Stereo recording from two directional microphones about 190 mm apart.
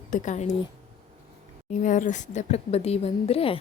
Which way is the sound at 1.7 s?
40° left (ahead or behind).